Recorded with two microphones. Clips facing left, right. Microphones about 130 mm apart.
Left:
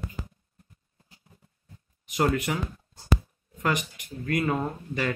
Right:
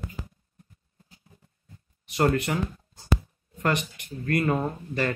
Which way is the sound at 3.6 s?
10° left (ahead or behind).